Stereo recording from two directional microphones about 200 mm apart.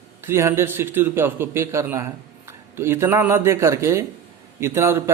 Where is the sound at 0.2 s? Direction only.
10° right (ahead or behind).